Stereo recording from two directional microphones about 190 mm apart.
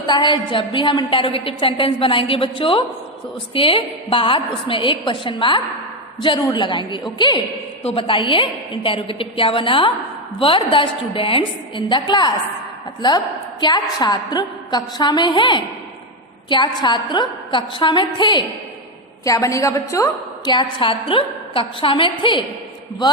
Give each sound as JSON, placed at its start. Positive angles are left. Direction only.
{"t": 0.1, "sound": "a woman's voice", "side_deg": 25}